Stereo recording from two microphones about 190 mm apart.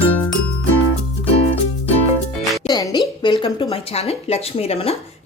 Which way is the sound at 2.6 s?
20° left (ahead or behind).